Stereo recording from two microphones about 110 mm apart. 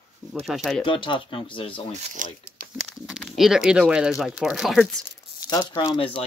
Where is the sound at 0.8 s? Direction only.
50° left (ahead or behind).